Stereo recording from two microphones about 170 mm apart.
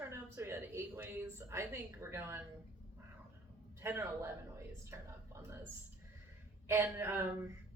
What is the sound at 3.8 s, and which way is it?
A woman's voice, 15° right (ahead or behind).